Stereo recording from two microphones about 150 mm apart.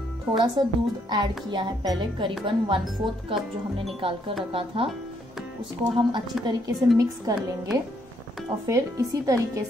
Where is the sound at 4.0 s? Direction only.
35° right (ahead or behind).